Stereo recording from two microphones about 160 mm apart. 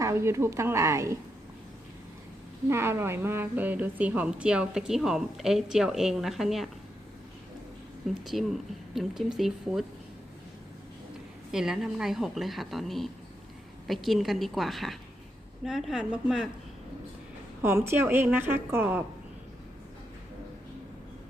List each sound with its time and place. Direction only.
0.0 s a woman's voice: 15° right (ahead or behind)
2.6 s a woman's voice: 15° right (ahead or behind)
8.0 s a woman's voice: centre (ahead or behind)
11.5 s a woman's voice: 5° right (ahead or behind)
17.6 s a woman's voice: 15° right (ahead or behind)